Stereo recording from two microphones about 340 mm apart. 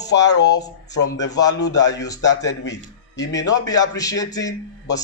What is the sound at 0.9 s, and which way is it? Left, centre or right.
Speech, left.